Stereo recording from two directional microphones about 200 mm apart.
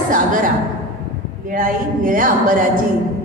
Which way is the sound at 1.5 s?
45° right (ahead or behind).